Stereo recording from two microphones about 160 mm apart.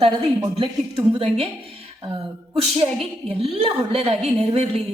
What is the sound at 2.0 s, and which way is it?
Speech, 25° right (ahead or behind).